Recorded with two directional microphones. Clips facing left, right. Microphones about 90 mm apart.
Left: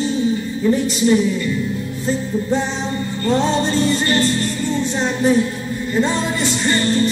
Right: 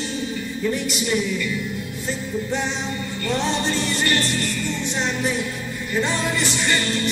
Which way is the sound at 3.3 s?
30° left (ahead or behind).